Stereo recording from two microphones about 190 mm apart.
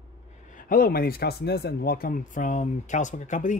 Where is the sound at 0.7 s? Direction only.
50° left (ahead or behind).